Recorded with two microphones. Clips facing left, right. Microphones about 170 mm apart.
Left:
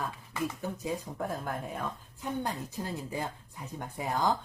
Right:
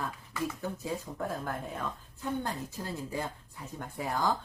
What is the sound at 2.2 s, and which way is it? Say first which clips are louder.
Speech: even; 15° left (ahead or behind).